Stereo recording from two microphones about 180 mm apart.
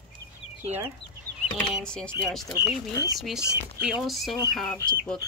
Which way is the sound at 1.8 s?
5° left (ahead or behind).